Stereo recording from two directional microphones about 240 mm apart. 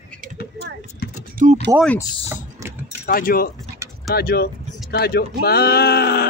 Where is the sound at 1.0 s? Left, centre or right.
Left.